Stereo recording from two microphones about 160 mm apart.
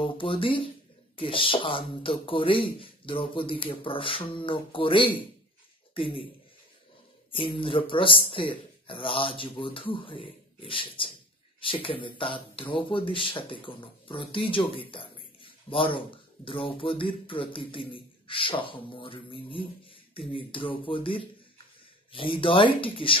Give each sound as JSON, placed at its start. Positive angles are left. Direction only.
{"t": 0.0, "sound": "speech", "side_deg": 30}
{"t": 7.2, "sound": "speech", "side_deg": 35}